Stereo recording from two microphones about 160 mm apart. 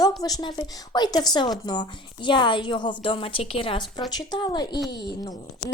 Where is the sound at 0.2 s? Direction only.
25° left (ahead or behind).